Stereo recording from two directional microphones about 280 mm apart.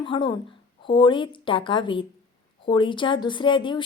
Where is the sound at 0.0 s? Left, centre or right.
Centre.